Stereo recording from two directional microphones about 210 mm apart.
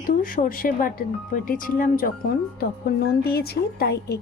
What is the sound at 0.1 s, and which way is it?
Speech, 40° left (ahead or behind).